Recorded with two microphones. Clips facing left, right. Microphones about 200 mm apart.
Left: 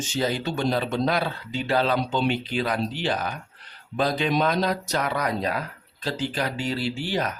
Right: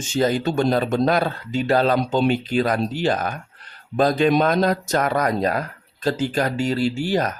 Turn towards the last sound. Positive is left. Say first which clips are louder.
# right 6 dB
turn(degrees=-45)  # may be behind; listen again after turning